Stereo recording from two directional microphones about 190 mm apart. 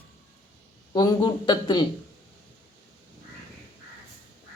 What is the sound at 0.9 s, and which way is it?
Speech, 25° left (ahead or behind).